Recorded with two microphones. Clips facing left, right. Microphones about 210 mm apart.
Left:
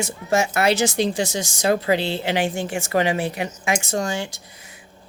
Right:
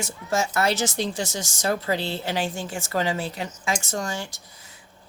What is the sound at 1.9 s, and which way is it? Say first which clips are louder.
A woman's voice: left 5 dB; 75° left (ahead or behind).